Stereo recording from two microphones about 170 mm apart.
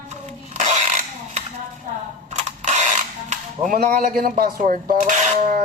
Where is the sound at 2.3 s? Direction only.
45° right (ahead or behind).